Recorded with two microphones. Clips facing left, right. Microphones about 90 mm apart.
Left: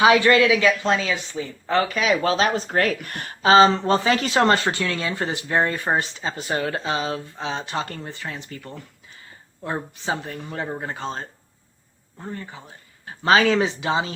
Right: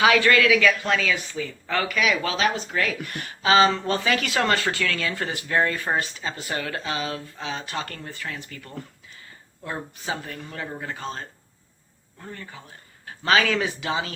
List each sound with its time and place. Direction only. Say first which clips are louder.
0.0 s speech: left 3 dB; 25° left (ahead or behind)